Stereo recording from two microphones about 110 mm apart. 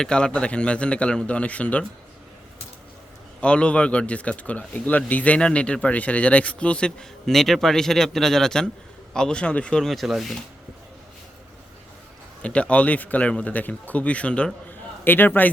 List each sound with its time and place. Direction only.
0.0 s speech: 10° left (ahead or behind)
3.4 s speech: 10° left (ahead or behind)
12.4 s speech: 10° left (ahead or behind)